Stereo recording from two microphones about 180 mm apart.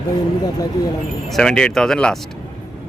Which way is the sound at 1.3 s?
5° left (ahead or behind).